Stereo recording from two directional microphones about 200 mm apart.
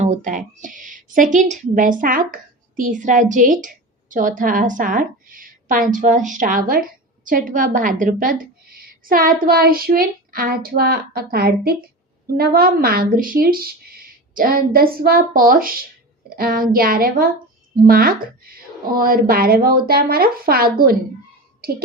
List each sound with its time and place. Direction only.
0.0 s a woman's voice: 35° right (ahead or behind)